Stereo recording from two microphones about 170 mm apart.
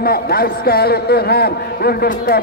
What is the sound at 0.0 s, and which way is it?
A man's voice, 65° left (ahead or behind).